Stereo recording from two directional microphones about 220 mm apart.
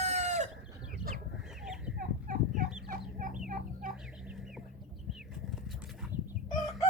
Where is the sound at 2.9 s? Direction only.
40° right (ahead or behind).